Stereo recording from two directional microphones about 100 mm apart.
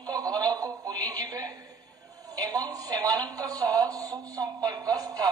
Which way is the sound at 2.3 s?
40° right (ahead or behind).